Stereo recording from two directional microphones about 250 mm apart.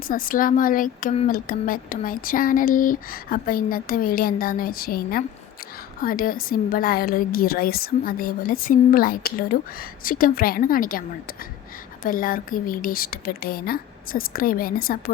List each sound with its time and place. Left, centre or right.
0.1 s speech: left
12.0 s speech: left